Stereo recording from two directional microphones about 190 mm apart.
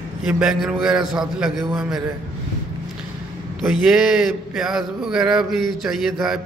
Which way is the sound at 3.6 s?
Centre (ahead or behind).